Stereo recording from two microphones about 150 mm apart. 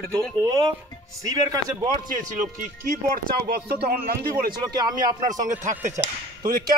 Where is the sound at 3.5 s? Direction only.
90° right.